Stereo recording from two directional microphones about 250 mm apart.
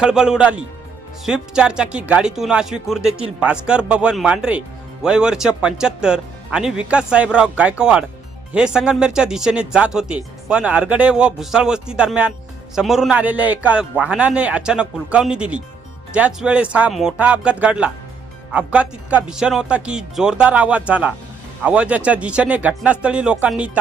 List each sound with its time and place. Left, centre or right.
0.0 s speech: centre